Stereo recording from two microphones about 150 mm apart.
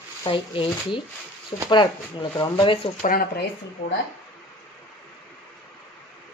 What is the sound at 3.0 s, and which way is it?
Speech, 80° left.